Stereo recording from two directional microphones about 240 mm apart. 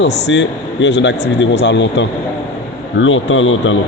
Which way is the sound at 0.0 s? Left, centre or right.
Left.